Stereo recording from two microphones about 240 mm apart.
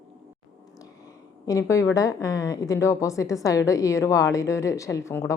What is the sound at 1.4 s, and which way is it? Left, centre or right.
A woman's voice, centre.